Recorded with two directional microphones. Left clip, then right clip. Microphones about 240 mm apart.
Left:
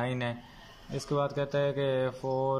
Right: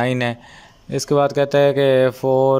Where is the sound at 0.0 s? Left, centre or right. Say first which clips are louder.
Right 13 dB; right.